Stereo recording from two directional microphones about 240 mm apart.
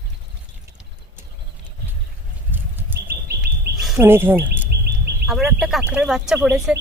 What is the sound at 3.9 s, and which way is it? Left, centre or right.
Speech, centre.